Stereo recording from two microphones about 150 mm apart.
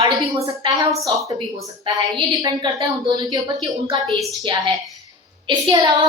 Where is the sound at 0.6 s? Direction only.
35° right (ahead or behind).